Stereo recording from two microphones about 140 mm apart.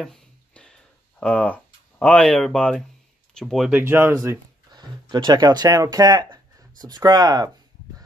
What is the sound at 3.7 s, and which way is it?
Speech, 15° right (ahead or behind).